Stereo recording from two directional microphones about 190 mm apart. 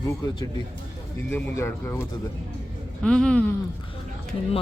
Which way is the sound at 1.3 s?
10° left (ahead or behind).